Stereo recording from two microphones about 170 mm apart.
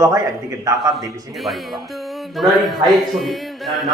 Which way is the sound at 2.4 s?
Centre (ahead or behind).